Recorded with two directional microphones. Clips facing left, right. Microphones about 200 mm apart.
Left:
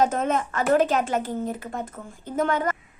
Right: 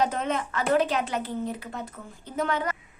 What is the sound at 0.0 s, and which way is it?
Speech, 45° left (ahead or behind).